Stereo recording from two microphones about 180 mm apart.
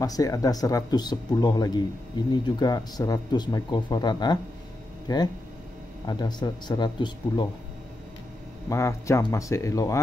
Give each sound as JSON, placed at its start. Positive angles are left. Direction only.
{"t": 0.0, "sound": "speech", "side_deg": 20}
{"t": 8.6, "sound": "speech", "side_deg": 15}